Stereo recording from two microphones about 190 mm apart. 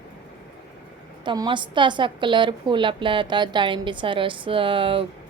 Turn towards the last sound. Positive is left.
turn(degrees=-30)  # may be behind; listen again after turning